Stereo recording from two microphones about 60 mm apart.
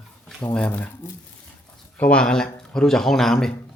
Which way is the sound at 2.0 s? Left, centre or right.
Centre.